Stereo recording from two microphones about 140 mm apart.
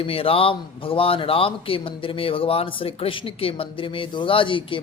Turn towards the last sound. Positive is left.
turn(degrees=40)  # may be behind; listen again after turning